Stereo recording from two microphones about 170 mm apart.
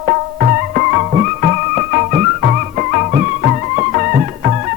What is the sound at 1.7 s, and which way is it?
Music, 45° right (ahead or behind).